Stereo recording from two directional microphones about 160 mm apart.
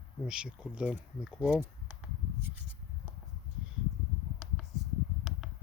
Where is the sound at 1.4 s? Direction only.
10° right (ahead or behind).